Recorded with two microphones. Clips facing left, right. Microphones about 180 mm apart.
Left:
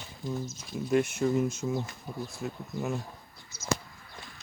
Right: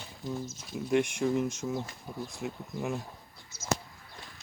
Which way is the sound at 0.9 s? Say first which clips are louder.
Left 1 dB; 5° left (ahead or behind).